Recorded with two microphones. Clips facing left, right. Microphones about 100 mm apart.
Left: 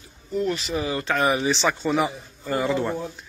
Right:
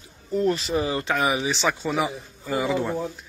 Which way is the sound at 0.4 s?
35° right (ahead or behind).